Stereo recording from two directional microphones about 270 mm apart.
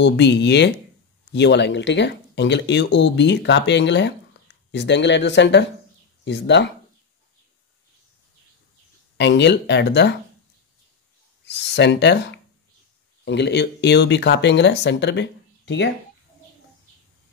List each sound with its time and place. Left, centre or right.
0.0 s speech: left
9.1 s speech: left
11.4 s speech: left